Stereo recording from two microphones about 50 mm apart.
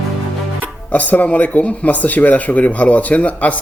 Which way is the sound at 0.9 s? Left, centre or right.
Left.